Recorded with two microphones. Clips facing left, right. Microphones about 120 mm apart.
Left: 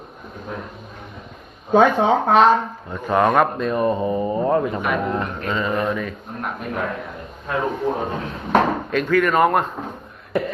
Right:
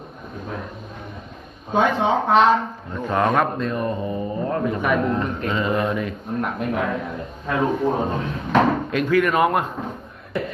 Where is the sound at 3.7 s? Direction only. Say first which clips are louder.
Left 5 dB; 25° left (ahead or behind).